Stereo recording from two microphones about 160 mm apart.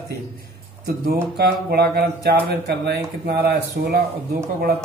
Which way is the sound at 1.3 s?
80° right.